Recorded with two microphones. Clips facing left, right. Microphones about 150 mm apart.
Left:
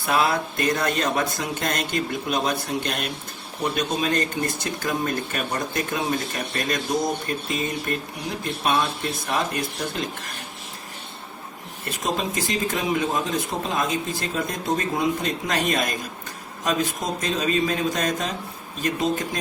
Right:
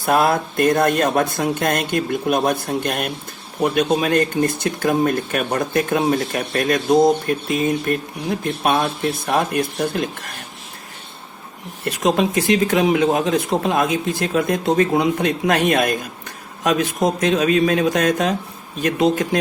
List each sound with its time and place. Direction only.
0.0 s speech: 50° right (ahead or behind)
12.0 s speech: 65° right (ahead or behind)